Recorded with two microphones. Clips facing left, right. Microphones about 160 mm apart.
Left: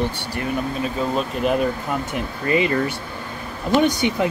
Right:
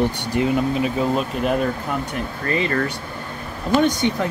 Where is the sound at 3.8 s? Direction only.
10° left (ahead or behind).